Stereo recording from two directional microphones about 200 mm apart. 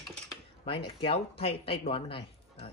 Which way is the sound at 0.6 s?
25° left (ahead or behind).